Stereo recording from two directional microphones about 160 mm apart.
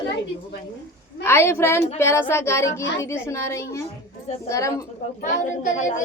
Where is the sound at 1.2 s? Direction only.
15° left (ahead or behind).